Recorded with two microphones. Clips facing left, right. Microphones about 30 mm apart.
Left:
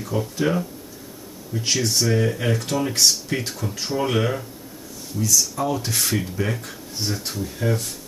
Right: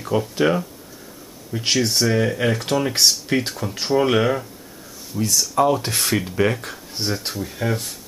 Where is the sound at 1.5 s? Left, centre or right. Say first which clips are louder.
Right 2 dB; right.